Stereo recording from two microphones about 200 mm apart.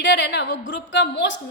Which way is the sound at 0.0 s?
60° left (ahead or behind).